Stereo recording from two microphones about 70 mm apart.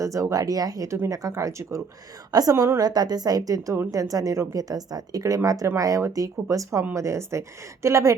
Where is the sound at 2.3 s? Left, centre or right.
Right.